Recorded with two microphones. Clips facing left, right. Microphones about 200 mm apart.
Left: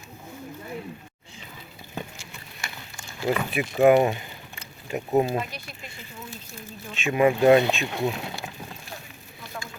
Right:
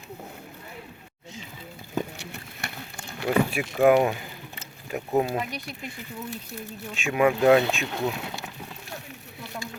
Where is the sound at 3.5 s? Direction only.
Centre (ahead or behind).